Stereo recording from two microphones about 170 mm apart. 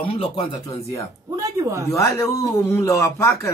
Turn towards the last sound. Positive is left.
turn(degrees=15)  # may be behind; listen again after turning